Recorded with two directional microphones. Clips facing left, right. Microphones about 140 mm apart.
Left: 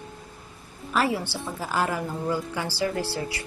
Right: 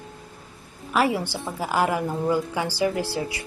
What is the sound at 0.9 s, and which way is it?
Speech, 15° right (ahead or behind).